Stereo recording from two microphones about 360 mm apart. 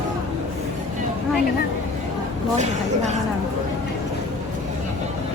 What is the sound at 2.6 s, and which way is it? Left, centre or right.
Speech, centre.